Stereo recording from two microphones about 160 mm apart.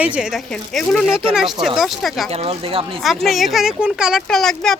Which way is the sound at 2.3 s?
40° right (ahead or behind).